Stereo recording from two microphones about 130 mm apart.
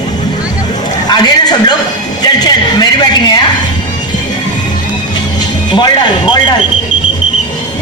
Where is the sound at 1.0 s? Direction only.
30° left (ahead or behind).